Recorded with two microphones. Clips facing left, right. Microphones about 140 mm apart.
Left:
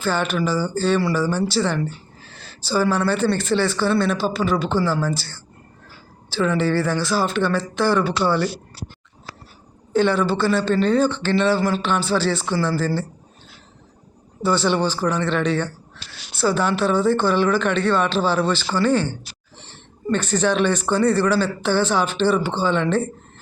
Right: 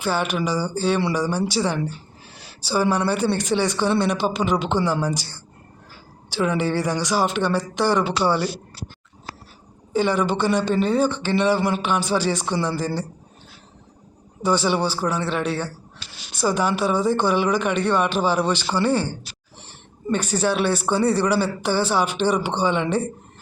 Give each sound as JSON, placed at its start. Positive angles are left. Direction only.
{"t": 0.0, "sound": "speech", "side_deg": -10}
{"t": 9.9, "sound": "speech", "side_deg": -10}
{"t": 14.4, "sound": "speech", "side_deg": -10}